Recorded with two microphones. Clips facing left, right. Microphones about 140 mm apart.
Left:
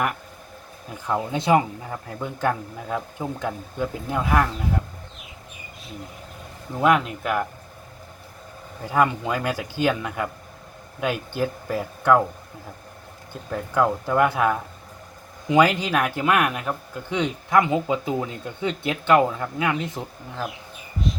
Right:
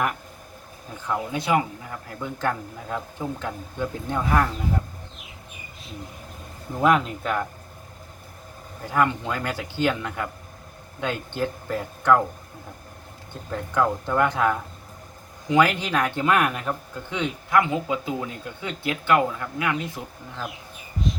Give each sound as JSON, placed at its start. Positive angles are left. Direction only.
{"t": 1.0, "sound": "speech", "side_deg": 25}
{"t": 2.4, "sound": "speech", "side_deg": 10}
{"t": 6.7, "sound": "speech", "side_deg": 5}
{"t": 8.9, "sound": "speech", "side_deg": 15}
{"t": 13.5, "sound": "speech", "side_deg": 10}
{"t": 17.1, "sound": "speech", "side_deg": 20}